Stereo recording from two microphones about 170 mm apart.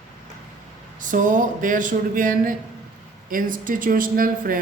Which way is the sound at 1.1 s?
50° right (ahead or behind).